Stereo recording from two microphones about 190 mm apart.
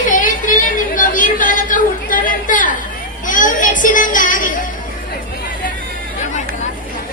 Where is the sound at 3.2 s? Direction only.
45° left (ahead or behind).